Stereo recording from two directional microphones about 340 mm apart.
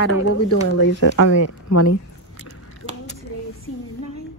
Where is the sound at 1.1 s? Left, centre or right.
Left.